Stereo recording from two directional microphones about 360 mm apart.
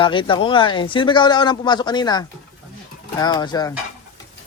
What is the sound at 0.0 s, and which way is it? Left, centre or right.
Speech, centre.